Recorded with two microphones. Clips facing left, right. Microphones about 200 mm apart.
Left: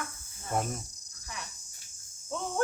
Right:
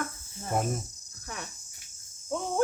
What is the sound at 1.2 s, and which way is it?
Speech, 55° right (ahead or behind).